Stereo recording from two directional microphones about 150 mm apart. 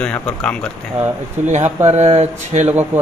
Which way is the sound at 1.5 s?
50° right (ahead or behind).